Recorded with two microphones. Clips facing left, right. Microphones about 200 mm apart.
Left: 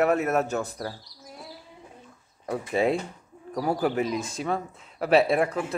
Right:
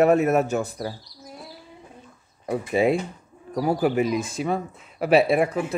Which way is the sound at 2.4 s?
10° right (ahead or behind).